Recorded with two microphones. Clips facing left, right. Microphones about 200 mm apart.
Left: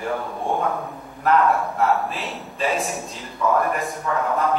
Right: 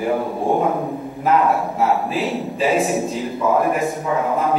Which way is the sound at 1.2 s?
5° right (ahead or behind).